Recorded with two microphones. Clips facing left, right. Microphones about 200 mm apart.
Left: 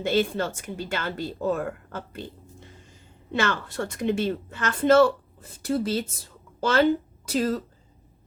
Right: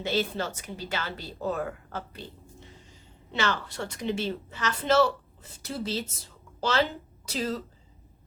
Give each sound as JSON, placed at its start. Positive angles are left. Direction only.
{"t": 0.0, "sound": "a woman's voice", "side_deg": 50}